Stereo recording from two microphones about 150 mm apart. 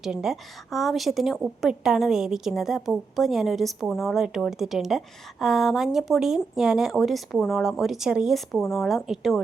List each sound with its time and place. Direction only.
0.0 s a woman's voice: 5° right (ahead or behind)